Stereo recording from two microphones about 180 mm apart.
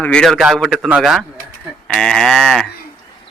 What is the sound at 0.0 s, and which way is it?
A man's voice, 5° left (ahead or behind).